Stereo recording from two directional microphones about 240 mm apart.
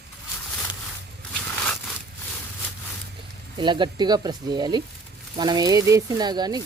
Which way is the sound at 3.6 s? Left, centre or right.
Centre.